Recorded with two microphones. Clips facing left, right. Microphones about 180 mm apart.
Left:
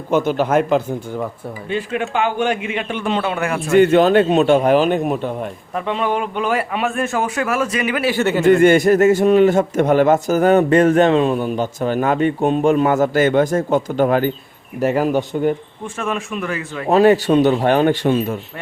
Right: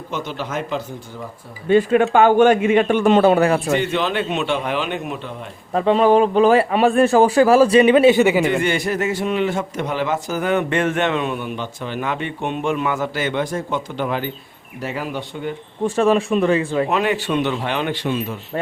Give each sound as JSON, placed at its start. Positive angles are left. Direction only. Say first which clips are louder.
{"t": 0.1, "sound": "a man's voice", "louder": "left 11 dB", "side_deg": 50}
{"t": 1.7, "sound": "a man's voice", "louder": "right 8 dB", "side_deg": -45}
{"t": 3.7, "sound": "a man's voice", "louder": "left 8 dB", "side_deg": 50}
{"t": 5.7, "sound": "a man's voice", "louder": "right 7 dB", "side_deg": -35}
{"t": 8.6, "sound": "a man's voice", "louder": "left 9 dB", "side_deg": 50}
{"t": 16.0, "sound": "a man's voice", "louder": "right 7 dB", "side_deg": -35}
{"t": 16.9, "sound": "a man's voice", "louder": "left 8 dB", "side_deg": 40}